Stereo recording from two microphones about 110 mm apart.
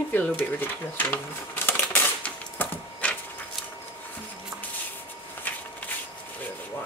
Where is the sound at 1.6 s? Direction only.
15° left (ahead or behind).